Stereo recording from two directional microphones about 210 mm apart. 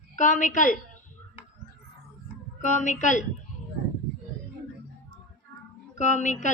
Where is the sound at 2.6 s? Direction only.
35° left (ahead or behind).